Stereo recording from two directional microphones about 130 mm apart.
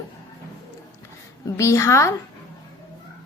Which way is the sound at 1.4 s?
20° left (ahead or behind).